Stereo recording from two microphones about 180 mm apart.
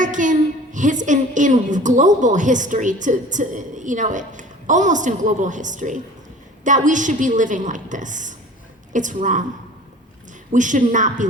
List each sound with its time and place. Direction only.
0.0 s a woman's voice: 45° right (ahead or behind)
10.5 s a woman's voice: 45° right (ahead or behind)